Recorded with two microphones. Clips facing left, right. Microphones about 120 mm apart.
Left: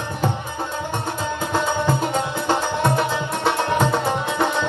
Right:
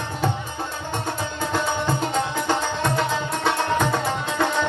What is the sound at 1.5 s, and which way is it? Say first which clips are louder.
Music: left 3 dB; 15° left (ahead or behind).